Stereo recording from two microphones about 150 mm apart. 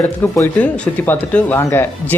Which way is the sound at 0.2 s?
15° left (ahead or behind).